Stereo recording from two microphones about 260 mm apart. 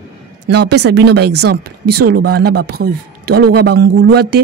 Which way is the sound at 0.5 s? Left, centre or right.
Right.